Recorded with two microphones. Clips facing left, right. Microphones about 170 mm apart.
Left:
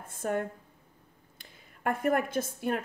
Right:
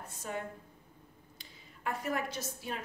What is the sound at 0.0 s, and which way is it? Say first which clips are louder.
A woman's voice: left 8 dB; 50° left (ahead or behind).